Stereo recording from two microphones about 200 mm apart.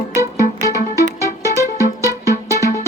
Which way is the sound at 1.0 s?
15° right (ahead or behind).